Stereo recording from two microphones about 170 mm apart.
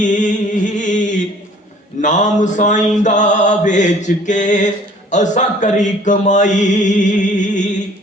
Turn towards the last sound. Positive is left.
turn(degrees=45)  # may be behind; listen again after turning